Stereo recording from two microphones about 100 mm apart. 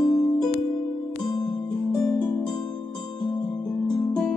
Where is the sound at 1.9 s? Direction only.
35° left (ahead or behind).